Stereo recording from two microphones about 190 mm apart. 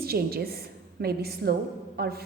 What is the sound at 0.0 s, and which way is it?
A woman's voice, 55° right (ahead or behind).